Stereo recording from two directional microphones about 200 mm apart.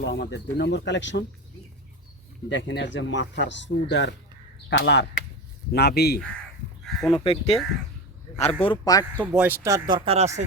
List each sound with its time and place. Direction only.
0.0 s speech: 60° left (ahead or behind)
2.5 s speech: 65° left (ahead or behind)
6.8 s speech: centre (ahead or behind)
7.3 s speech: 30° left (ahead or behind)
9.1 s speech: 10° right (ahead or behind)
9.9 s speech: 30° right (ahead or behind)